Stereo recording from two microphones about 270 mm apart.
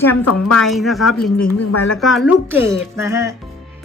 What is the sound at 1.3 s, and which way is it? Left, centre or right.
Speech, left.